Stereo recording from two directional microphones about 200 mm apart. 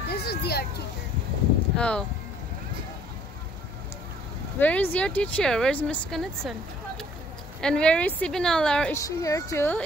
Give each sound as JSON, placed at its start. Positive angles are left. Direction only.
{"t": 0.1, "sound": "a sound", "side_deg": 55}
{"t": 1.8, "sound": "a woman's voice", "side_deg": 5}
{"t": 4.6, "sound": "speech", "side_deg": 10}
{"t": 7.6, "sound": "a woman's voice", "side_deg": 5}
{"t": 8.9, "sound": "speech", "side_deg": 15}